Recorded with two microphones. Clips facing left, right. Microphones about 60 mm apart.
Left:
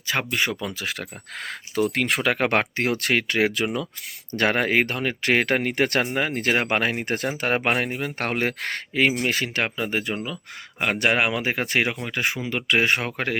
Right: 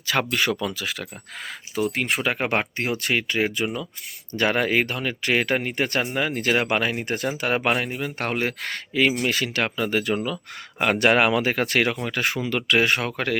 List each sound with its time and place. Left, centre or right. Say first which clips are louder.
0.1 s speech: right 2 dB; centre
1.5 s speech: left 2 dB; left
4.3 s speech: even; left
7.7 s speech: even; left
9.6 s speech: right 3 dB; centre
10.8 s speech: right 3 dB; centre
12.5 s speech: right 1 dB; left